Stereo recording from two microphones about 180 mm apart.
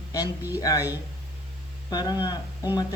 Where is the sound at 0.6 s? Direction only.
20° left (ahead or behind).